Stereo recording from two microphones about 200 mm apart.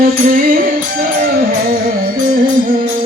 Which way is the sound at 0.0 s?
45° right (ahead or behind).